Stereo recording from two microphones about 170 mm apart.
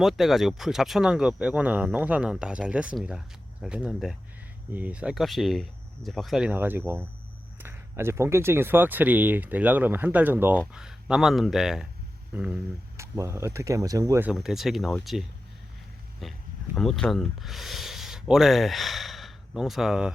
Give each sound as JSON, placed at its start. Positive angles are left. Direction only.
{"t": 0.0, "sound": "speech", "side_deg": 0}
{"t": 6.5, "sound": "speech", "side_deg": -10}